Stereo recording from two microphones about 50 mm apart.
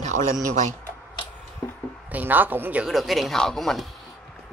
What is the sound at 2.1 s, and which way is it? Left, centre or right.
Speech, right.